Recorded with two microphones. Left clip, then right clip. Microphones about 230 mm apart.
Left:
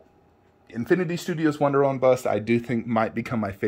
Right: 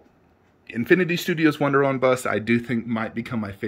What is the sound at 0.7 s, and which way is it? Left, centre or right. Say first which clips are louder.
Speech: right 4 dB; right.